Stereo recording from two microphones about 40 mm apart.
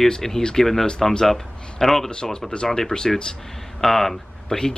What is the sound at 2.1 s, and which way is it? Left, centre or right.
A man's voice, centre.